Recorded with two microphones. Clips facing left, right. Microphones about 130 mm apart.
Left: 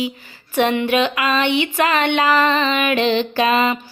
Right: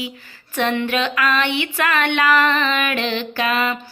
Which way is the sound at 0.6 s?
15° left (ahead or behind).